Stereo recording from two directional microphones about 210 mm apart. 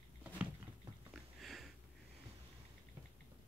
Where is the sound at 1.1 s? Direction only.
Centre (ahead or behind).